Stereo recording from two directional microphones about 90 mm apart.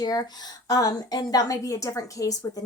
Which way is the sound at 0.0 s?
45° left (ahead or behind).